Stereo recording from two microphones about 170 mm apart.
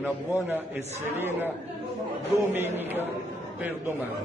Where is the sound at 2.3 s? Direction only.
15° right (ahead or behind).